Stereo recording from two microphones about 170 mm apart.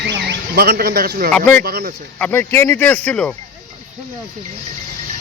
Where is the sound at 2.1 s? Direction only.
10° left (ahead or behind).